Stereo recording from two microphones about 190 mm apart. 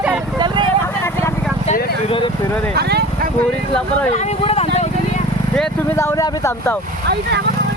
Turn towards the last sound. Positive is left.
turn(degrees=15)  # may be behind; listen again after turning